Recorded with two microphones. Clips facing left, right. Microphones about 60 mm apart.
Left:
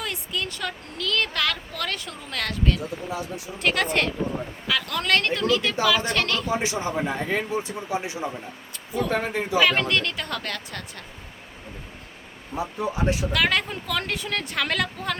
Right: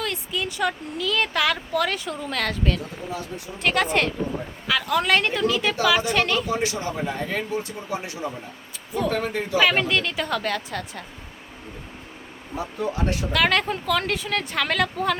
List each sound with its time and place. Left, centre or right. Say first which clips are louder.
0.0 s speech: right 2 dB; centre
3.1 s speech: left 1 dB; centre
3.6 s a woman's voice: right 2 dB; centre
6.5 s speech: even; left
9.0 s speech: right 1 dB; centre
9.6 s speech: right 1 dB; centre
13.3 s speech: right 2 dB; centre